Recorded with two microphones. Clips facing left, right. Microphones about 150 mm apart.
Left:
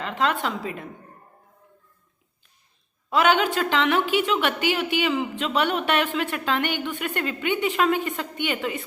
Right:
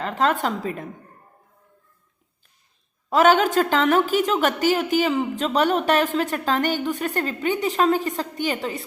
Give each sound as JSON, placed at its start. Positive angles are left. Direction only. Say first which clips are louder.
{"t": 0.0, "sound": "a woman's voice", "louder": "right 3 dB", "side_deg": -40}
{"t": 3.1, "sound": "a woman's voice", "louder": "right 4 dB", "side_deg": -40}